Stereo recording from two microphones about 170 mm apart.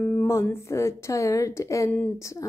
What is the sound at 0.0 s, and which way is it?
Speech, 10° left (ahead or behind).